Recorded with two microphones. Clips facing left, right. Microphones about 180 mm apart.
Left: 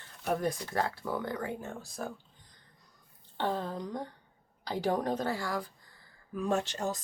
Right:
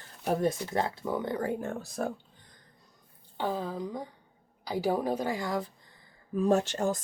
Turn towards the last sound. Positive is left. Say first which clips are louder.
# right 5 dB
turn(degrees=-45)  # may be behind; listen again after turning